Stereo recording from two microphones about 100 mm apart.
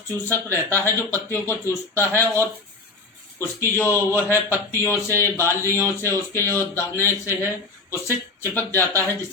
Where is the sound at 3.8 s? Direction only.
25° left (ahead or behind).